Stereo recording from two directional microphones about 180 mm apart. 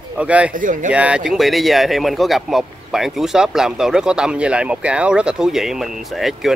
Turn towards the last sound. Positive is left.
turn(degrees=0)  # may be behind; listen again after turning